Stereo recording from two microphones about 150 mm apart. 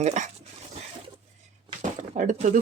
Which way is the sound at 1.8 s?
60° right (ahead or behind).